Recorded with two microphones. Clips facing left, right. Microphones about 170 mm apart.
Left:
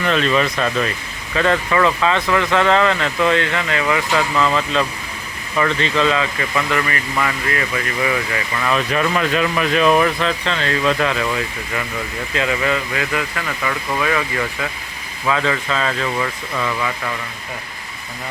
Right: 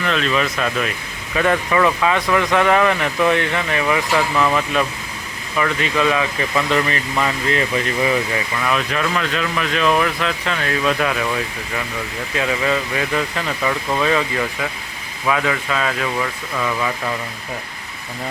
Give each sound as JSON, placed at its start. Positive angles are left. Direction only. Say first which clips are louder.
{"t": 0.0, "sound": "speech", "louder": "left 2 dB", "side_deg": 0}
{"t": 8.6, "sound": "speech", "louder": "left 3 dB", "side_deg": 0}
{"t": 12.4, "sound": "speech", "louder": "even", "side_deg": -15}